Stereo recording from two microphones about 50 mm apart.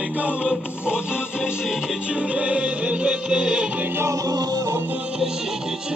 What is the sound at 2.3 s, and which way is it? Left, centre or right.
Music, right.